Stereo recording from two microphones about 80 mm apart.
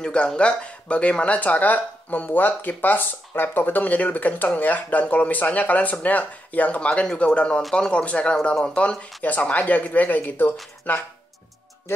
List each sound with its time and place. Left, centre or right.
0.0 s speech: centre